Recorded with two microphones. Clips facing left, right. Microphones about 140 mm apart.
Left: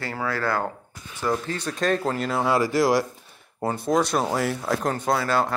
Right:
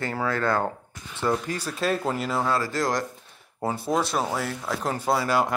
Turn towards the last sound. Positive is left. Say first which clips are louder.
# even
turn(degrees=-10)  # may be behind; listen again after turning